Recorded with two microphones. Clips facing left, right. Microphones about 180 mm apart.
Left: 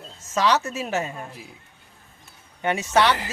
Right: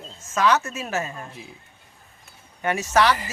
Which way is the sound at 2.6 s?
25° left (ahead or behind).